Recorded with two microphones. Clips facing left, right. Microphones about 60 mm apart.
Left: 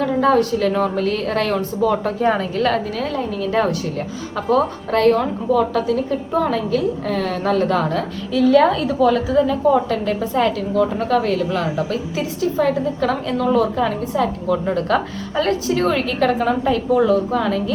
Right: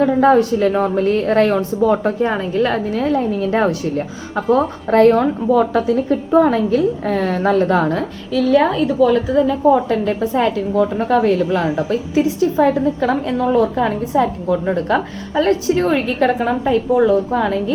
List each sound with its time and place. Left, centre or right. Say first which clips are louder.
0.3 s a woman's voice: right 3 dB; centre
2.2 s a woman's voice: right 1 dB; centre
2.9 s a woman's voice: right 5 dB; right
8.5 s a woman's voice: right 2 dB; centre
15.4 s a woman's voice: right 3 dB; right